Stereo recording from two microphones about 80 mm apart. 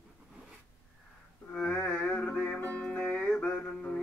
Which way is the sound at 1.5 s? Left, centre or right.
Centre.